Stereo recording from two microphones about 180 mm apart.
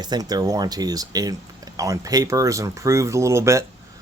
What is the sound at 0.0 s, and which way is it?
Speech, 20° right (ahead or behind).